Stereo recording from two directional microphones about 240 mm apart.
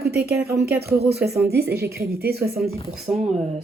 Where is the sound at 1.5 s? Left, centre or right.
Right.